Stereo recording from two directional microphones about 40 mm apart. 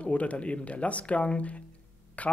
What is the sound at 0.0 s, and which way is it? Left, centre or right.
Speech, left.